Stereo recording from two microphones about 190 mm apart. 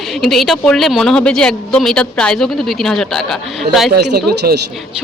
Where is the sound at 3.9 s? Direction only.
60° right (ahead or behind).